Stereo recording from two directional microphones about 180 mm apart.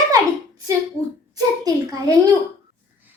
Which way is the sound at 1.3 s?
20° right (ahead or behind).